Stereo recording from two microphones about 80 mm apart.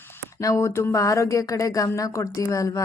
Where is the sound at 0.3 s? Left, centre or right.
Left.